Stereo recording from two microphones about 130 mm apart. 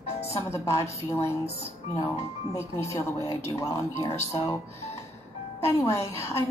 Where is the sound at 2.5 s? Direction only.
25° left (ahead or behind).